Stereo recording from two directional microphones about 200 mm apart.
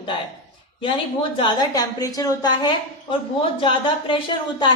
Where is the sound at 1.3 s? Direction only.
20° left (ahead or behind).